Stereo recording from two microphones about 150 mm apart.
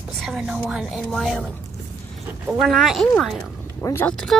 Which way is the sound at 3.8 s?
15° left (ahead or behind).